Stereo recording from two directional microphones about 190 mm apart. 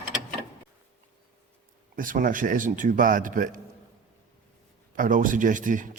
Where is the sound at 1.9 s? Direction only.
45° right (ahead or behind).